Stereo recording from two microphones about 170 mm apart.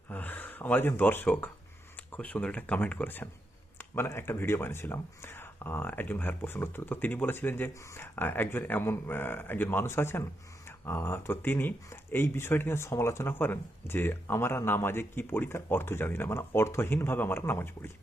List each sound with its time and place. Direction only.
0.1 s speech: 10° left (ahead or behind)